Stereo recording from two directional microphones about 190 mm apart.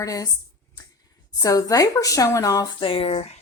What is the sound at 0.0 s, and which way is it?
Speech, 15° left (ahead or behind).